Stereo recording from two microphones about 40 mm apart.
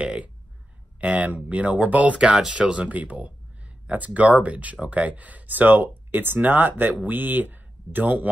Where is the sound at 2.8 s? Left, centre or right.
Right.